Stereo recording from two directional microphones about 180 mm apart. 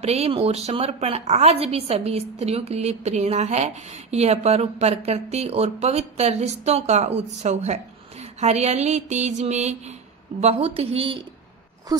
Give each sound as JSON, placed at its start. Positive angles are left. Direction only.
{"t": 0.0, "sound": "a woman's voice", "side_deg": -35}